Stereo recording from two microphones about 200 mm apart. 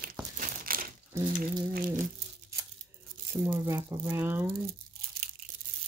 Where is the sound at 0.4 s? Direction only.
45° right (ahead or behind).